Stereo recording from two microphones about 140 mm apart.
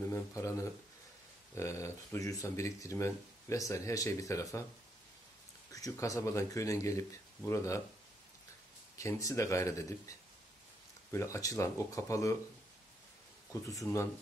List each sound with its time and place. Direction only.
0.1 s speech: 20° left (ahead or behind)
5.7 s speech: 25° left (ahead or behind)
8.9 s speech: 20° left (ahead or behind)
13.5 s speech: 20° left (ahead or behind)